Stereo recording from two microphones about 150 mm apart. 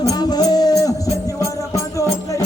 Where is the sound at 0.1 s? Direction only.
25° left (ahead or behind).